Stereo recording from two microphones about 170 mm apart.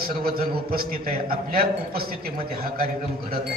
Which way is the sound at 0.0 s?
60° right (ahead or behind).